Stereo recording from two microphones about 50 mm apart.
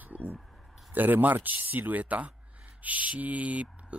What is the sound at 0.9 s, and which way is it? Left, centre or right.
Speech, right.